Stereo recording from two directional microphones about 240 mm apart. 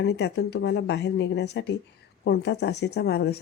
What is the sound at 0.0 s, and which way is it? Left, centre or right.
A woman's voice, left.